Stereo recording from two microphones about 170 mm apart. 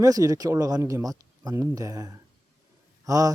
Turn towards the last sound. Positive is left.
turn(degrees=-20)  # may be behind; listen again after turning